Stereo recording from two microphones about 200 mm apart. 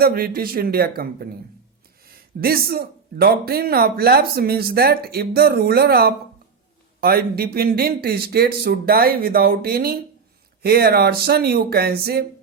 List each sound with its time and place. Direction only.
0.0 s speech: 50° right (ahead or behind)